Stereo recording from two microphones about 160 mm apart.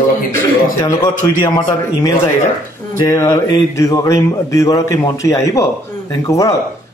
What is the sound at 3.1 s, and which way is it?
A man's voice, 20° left (ahead or behind).